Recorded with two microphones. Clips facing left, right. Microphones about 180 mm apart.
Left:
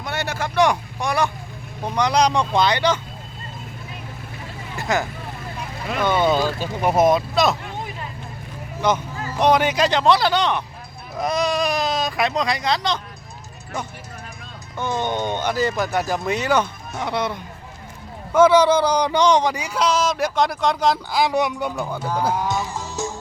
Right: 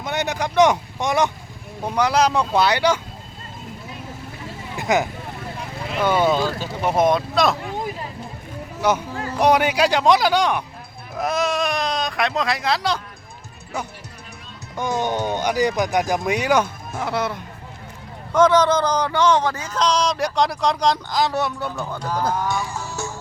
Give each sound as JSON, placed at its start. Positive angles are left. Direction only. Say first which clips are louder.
{"t": 0.0, "sound": "speech", "louder": "right 2 dB", "side_deg": -20}
{"t": 1.8, "sound": "speech", "louder": "even", "side_deg": -5}
{"t": 4.8, "sound": "speech", "louder": "right 3 dB", "side_deg": -20}
{"t": 6.4, "sound": "speech", "louder": "left 1 dB", "side_deg": 10}
{"t": 8.8, "sound": "speech", "louder": "right 1 dB", "side_deg": -10}
{"t": 14.8, "sound": "speech", "louder": "right 1 dB", "side_deg": -10}
{"t": 18.3, "sound": "speech", "louder": "left 2 dB", "side_deg": 10}
{"t": 22.4, "sound": "music", "louder": "even", "side_deg": 20}